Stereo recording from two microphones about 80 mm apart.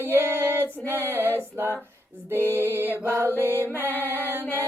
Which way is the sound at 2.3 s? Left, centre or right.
Left.